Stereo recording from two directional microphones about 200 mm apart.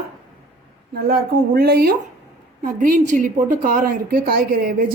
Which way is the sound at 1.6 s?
50° right (ahead or behind).